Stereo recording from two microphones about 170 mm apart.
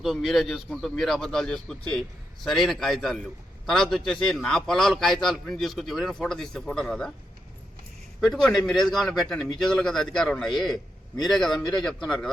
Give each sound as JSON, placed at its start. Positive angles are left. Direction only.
{"t": 0.0, "sound": "a man's voice", "side_deg": 0}
{"t": 8.2, "sound": "a man's voice", "side_deg": 5}